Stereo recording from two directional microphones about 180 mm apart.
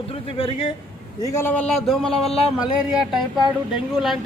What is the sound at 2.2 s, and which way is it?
Speech, 35° left (ahead or behind).